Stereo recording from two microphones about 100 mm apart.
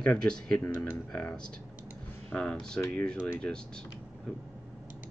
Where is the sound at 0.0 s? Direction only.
10° left (ahead or behind).